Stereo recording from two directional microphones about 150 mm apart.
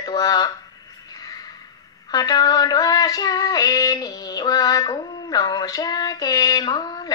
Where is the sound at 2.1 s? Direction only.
25° left (ahead or behind).